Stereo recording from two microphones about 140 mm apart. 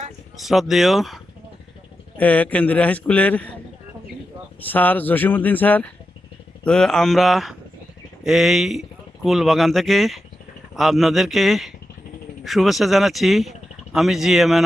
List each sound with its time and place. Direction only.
0.4 s speech: centre (ahead or behind)
2.1 s a man's voice: 10° left (ahead or behind)
4.6 s a man's voice: 10° left (ahead or behind)